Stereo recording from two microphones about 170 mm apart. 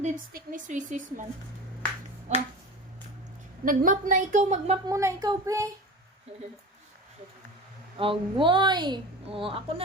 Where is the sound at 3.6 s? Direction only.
55° right (ahead or behind).